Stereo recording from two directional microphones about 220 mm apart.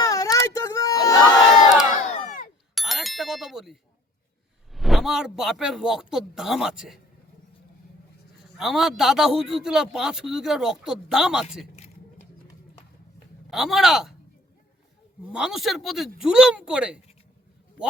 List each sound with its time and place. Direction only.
0.0 s a sound: 15° left (ahead or behind)
1.9 s crowd: 40° left (ahead or behind)
2.7 s bicycle bell: centre (ahead or behind)
4.7 s a man's voice: centre (ahead or behind)
8.5 s a man's voice: centre (ahead or behind)
13.5 s a man's voice: centre (ahead or behind)
15.3 s a man's voice: 5° right (ahead or behind)